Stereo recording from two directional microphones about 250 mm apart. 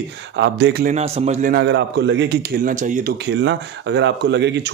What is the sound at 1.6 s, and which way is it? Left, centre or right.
A man's voice, right.